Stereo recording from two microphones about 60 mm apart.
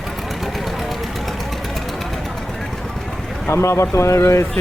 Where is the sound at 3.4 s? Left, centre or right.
Left.